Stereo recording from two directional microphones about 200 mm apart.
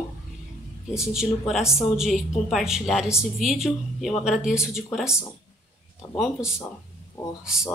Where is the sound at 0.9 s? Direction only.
5° right (ahead or behind).